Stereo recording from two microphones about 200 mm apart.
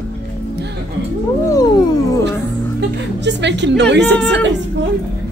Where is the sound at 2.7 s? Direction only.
60° right (ahead or behind).